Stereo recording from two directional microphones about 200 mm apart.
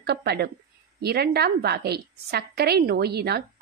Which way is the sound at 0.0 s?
55° right (ahead or behind).